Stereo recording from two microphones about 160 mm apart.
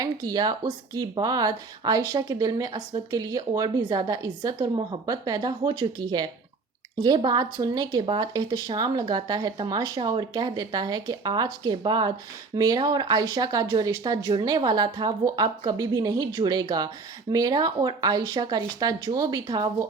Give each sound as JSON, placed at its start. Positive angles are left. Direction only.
{"t": 0.0, "sound": "speech", "side_deg": -25}